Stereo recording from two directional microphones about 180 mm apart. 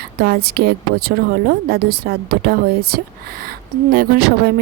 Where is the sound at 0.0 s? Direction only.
60° right (ahead or behind).